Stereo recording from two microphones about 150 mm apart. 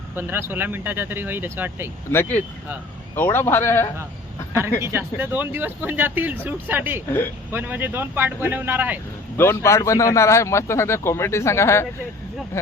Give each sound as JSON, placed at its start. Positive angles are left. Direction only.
{"t": 0.2, "sound": "speech", "side_deg": -15}
{"t": 3.2, "sound": "a man's voice", "side_deg": 15}
{"t": 4.8, "sound": "speech", "side_deg": -15}
{"t": 9.4, "sound": "a man's voice", "side_deg": 20}